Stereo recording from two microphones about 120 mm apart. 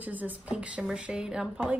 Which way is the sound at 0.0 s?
15° right (ahead or behind).